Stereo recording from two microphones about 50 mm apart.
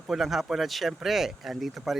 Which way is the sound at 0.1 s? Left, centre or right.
Centre.